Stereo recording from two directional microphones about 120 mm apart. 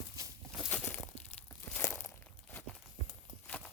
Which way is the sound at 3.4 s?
10° left (ahead or behind).